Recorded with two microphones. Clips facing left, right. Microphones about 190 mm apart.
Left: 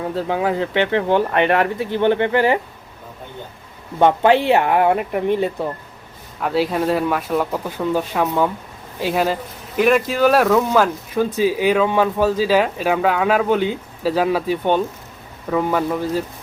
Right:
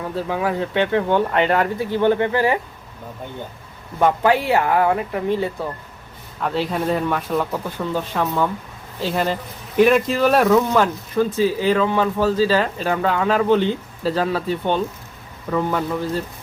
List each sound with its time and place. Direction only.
0.3 s speech: 25° left (ahead or behind)
4.0 s speech: 25° left (ahead or behind)
6.4 s speech: 5° left (ahead or behind)